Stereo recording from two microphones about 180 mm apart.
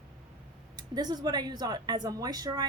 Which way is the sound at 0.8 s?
20° right (ahead or behind).